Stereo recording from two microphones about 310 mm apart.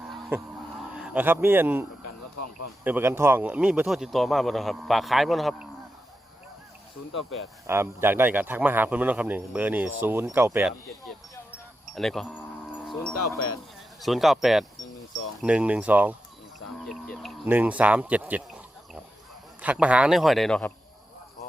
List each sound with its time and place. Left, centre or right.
0.1 s a sound: centre
0.9 s a man's voice: centre
2.0 s a sound: left
2.8 s speech: centre
7.7 s speech: centre
11.9 s speech: centre
12.9 s wind chime: centre
13.1 s speech: left
14.0 s speech: centre
19.6 s speech: centre